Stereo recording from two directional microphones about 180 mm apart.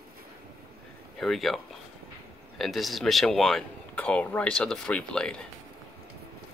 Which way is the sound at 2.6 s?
Centre (ahead or behind).